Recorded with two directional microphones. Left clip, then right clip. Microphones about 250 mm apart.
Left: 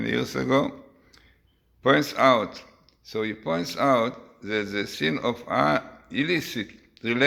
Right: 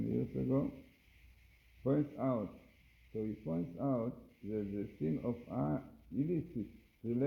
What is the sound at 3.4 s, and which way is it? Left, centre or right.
Speech, left.